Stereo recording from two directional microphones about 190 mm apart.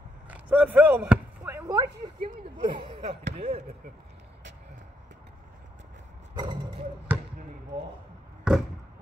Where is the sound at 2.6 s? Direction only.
30° right (ahead or behind).